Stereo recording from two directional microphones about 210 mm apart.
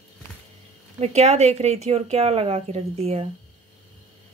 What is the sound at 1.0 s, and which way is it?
Speech, 30° right (ahead or behind).